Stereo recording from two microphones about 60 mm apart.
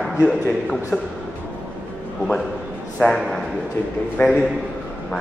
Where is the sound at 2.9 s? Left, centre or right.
Centre.